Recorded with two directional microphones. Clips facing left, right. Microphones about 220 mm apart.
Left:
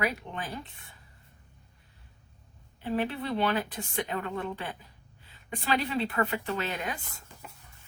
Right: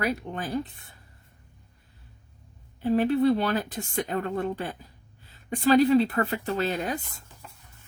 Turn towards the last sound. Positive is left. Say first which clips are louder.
# right 5 dB
turn(degrees=-40)  # may be behind; listen again after turning